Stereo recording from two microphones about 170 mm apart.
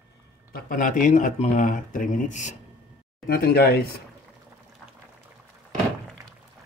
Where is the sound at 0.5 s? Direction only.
55° left (ahead or behind).